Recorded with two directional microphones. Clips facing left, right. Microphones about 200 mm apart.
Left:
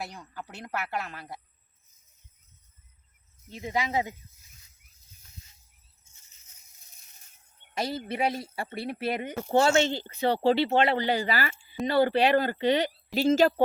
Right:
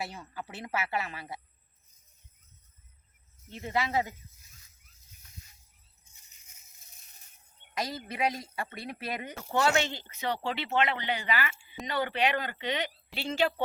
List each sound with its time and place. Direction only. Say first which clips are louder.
0.0 s speech: even; 5° right (ahead or behind)
3.5 s speech: left 1 dB; 15° left (ahead or behind)
7.8 s speech: left 3 dB; 30° left (ahead or behind)